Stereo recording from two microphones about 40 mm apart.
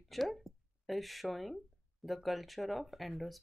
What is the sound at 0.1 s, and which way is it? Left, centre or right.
Speech, centre.